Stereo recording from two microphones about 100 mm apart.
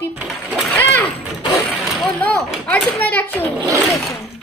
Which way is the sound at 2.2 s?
15° left (ahead or behind).